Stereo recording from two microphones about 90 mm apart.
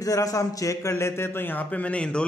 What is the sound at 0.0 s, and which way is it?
A man's voice, 40° left (ahead or behind).